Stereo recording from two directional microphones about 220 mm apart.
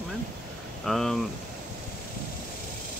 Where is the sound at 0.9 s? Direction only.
Centre (ahead or behind).